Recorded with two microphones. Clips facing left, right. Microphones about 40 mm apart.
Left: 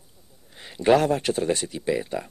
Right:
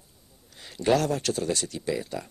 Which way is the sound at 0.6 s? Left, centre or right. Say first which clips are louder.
Left 5 dB; left.